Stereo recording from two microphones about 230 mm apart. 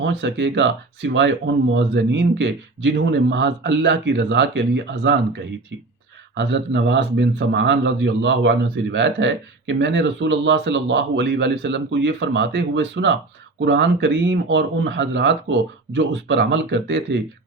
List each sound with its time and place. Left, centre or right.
0.0 s speech: right